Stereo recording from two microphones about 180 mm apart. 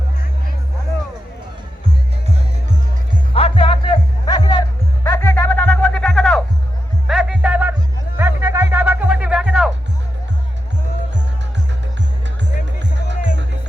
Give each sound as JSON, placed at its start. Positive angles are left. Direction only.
{"t": 3.3, "sound": "music", "side_deg": 30}
{"t": 13.1, "sound": "music", "side_deg": -80}